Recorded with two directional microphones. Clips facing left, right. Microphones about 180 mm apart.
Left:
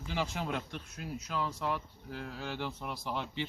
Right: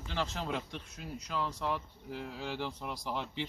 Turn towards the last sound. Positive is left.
turn(degrees=0)  # may be behind; listen again after turning